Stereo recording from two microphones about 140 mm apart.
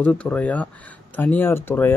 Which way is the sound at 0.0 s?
10° left (ahead or behind).